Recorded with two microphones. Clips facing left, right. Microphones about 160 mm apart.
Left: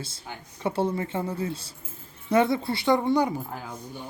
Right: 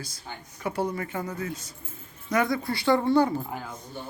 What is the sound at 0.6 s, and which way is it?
Speech, 25° left (ahead or behind).